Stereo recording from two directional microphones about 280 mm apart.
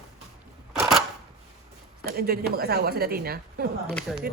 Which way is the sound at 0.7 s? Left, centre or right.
Centre.